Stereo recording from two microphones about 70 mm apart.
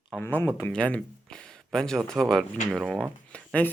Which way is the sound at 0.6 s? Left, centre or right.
Centre.